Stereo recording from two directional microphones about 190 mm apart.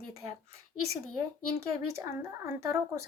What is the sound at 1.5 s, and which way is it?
Speech, 15° right (ahead or behind).